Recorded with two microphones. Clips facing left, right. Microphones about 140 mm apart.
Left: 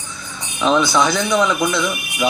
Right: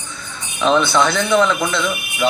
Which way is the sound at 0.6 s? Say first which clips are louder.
Right 1 dB; 5° left (ahead or behind).